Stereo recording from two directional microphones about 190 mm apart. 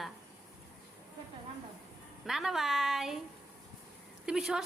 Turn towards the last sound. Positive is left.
turn(degrees=-5)  # may be behind; listen again after turning